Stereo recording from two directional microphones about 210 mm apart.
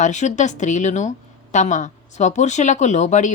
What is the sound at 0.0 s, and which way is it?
Speech, 35° left (ahead or behind).